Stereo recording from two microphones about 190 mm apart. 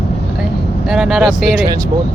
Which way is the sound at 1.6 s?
20° right (ahead or behind).